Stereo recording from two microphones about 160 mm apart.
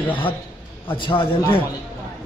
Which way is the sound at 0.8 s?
30° left (ahead or behind).